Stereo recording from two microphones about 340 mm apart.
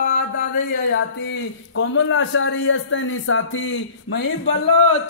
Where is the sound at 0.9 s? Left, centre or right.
Left.